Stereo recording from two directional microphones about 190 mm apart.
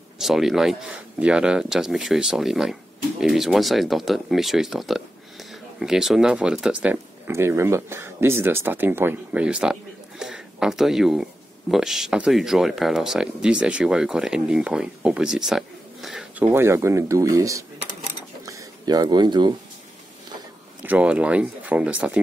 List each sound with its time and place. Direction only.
0.2 s speech: centre (ahead or behind)
16.4 s speech: 15° right (ahead or behind)
18.4 s a sound: 15° right (ahead or behind)
20.8 s speech: 10° right (ahead or behind)